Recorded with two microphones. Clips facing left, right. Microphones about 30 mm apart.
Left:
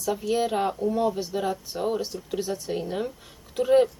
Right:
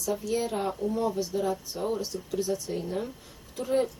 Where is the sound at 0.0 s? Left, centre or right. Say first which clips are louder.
Left 4 dB; left.